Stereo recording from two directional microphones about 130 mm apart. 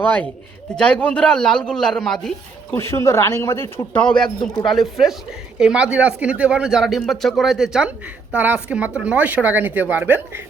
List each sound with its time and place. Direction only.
0.8 s a man's voice: 10° left (ahead or behind)
2.7 s speech: 20° left (ahead or behind)
4.1 s speech: 35° left (ahead or behind)
4.6 s a man's voice: centre (ahead or behind)